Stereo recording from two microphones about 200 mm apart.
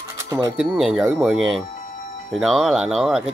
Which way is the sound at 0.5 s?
Centre (ahead or behind).